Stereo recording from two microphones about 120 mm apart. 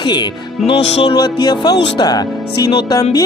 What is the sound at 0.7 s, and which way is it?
Music, 50° left (ahead or behind).